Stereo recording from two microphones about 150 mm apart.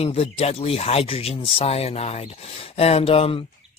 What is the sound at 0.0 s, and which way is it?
A man's voice, 40° left (ahead or behind).